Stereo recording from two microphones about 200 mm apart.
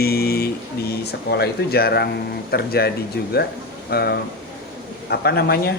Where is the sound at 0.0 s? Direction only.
50° left (ahead or behind).